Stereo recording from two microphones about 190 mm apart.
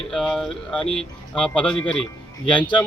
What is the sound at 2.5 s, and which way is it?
Speech, 25° left (ahead or behind).